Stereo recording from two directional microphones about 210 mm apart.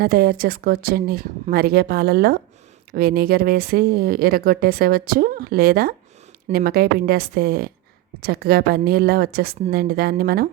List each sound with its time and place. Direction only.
0.0 s speech: 45° right (ahead or behind)